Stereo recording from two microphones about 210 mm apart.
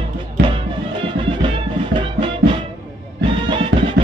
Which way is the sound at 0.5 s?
25° right (ahead or behind).